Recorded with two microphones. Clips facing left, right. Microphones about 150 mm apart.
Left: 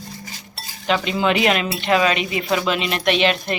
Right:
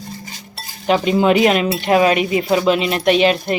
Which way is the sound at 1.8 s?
50° right (ahead or behind).